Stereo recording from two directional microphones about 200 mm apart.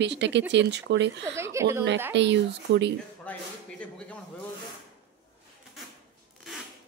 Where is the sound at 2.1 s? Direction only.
60° right (ahead or behind).